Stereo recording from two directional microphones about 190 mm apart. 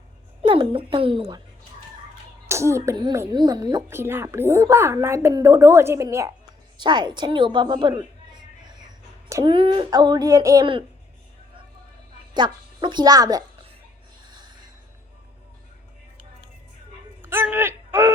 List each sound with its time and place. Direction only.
0.4 s speech: 25° right (ahead or behind)
2.5 s a woman's voice: 15° right (ahead or behind)
12.3 s a woman's voice: 25° right (ahead or behind)
17.2 s a sound: 10° right (ahead or behind)